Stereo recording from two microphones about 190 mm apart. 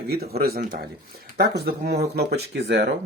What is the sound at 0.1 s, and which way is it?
Speech, 55° right (ahead or behind).